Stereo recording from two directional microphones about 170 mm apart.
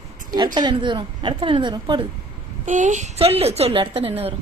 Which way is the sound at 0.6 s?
25° right (ahead or behind).